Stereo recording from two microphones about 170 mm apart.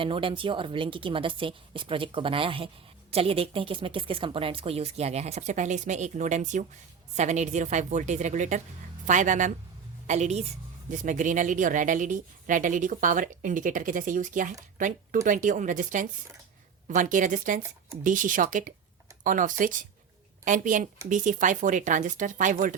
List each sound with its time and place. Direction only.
0.0 s speech: 30° right (ahead or behind); by 22.8 s 50° right (ahead or behind)